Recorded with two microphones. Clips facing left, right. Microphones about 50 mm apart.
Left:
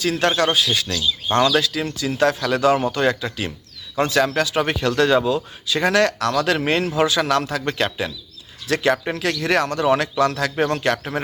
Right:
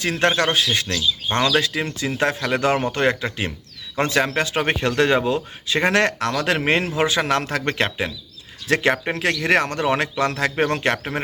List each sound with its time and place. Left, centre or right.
0.0 s speech: right
7.9 s speech: right